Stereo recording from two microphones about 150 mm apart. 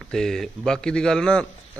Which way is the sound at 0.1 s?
5° left (ahead or behind).